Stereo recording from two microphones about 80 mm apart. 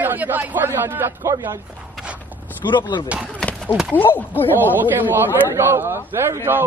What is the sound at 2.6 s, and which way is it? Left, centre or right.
Speech, left.